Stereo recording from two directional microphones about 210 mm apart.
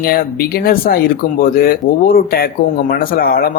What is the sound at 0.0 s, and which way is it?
Speech, 45° left (ahead or behind).